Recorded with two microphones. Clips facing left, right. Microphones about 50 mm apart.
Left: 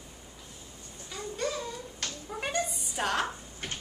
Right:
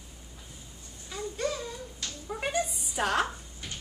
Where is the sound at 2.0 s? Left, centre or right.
Left.